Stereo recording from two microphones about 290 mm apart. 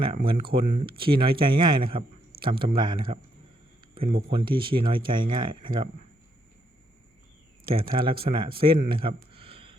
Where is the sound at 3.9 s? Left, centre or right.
Centre.